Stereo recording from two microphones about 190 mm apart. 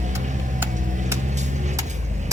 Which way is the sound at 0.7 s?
40° right (ahead or behind).